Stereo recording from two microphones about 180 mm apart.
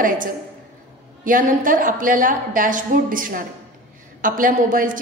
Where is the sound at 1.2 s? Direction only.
50° right (ahead or behind).